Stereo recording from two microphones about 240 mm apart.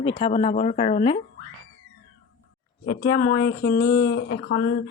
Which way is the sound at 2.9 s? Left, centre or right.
Left.